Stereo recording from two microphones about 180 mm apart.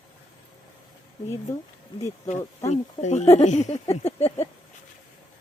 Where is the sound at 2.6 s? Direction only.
40° left (ahead or behind).